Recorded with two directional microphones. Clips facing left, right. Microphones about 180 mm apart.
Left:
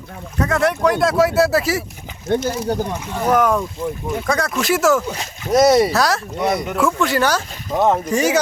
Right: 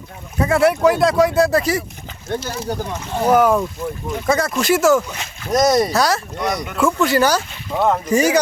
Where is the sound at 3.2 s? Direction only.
5° right (ahead or behind).